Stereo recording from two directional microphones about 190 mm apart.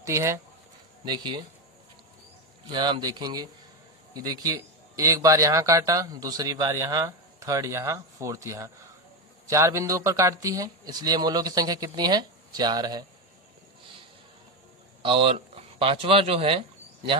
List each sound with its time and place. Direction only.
0.0 s a man's voice: 15° right (ahead or behind)
2.7 s a man's voice: 25° right (ahead or behind)
15.0 s speech: 30° right (ahead or behind)